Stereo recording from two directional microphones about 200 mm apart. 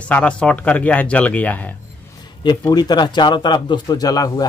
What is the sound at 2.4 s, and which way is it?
Speech, 20° left (ahead or behind).